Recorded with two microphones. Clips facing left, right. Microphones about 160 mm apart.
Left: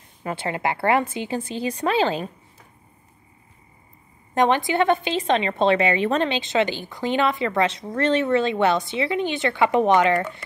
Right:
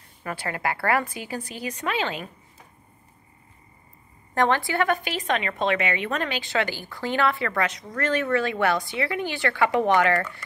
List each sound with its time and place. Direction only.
0.2 s a woman's voice: 20° left (ahead or behind)
4.3 s a woman's voice: 20° left (ahead or behind)